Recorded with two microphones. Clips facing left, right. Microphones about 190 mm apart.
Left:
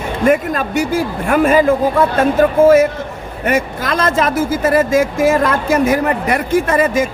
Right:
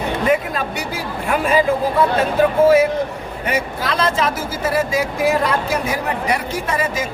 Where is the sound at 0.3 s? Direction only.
50° left (ahead or behind).